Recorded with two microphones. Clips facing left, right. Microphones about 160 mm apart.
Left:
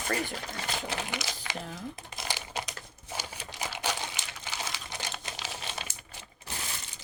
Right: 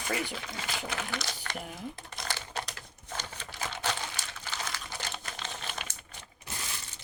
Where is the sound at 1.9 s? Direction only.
10° left (ahead or behind).